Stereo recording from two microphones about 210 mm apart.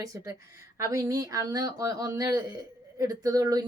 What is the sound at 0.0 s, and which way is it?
Speech, 15° right (ahead or behind).